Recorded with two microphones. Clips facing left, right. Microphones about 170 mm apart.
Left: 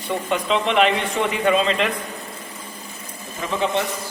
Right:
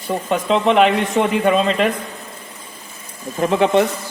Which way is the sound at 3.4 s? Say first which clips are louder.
Right 7 dB; 65° right (ahead or behind).